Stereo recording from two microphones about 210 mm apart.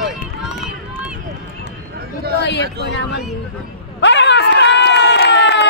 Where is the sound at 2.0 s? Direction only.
50° right (ahead or behind).